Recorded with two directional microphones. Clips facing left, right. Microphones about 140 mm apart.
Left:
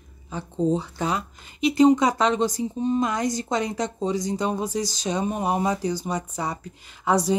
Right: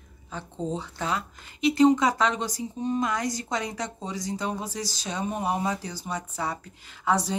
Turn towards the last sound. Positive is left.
turn(degrees=15)  # may be behind; listen again after turning